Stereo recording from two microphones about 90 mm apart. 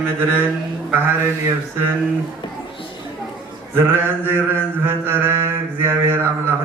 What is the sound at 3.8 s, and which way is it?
Mantra, 25° right (ahead or behind).